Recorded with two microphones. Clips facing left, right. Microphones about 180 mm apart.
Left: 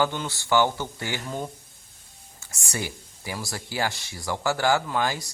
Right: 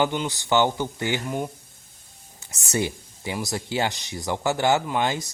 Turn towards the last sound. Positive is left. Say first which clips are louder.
# right 2 dB
turn(degrees=-20)  # may be behind; listen again after turning